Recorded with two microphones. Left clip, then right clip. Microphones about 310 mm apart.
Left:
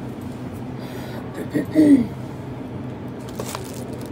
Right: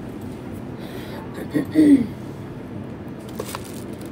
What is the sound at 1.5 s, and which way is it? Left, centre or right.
Speech, centre.